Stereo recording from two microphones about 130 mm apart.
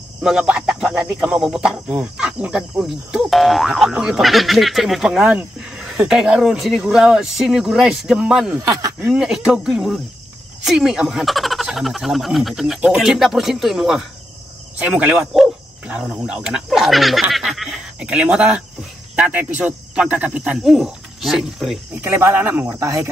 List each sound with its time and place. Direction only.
0.2 s speech: 5° right (ahead or behind)
22.0 s speech: 15° right (ahead or behind)
22.8 s speech: 25° right (ahead or behind)